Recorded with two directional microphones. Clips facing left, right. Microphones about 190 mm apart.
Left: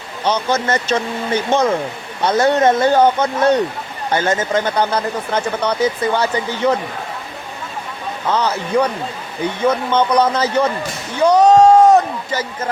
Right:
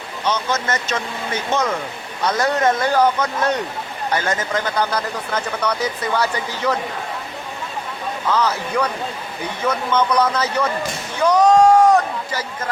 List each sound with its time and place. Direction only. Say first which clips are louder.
0.3 s speech: left 4 dB; 30° left (ahead or behind)
8.3 s speech: left 3 dB; 30° left (ahead or behind)